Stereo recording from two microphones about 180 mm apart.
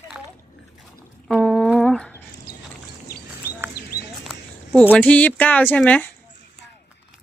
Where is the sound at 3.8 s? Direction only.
55° left (ahead or behind).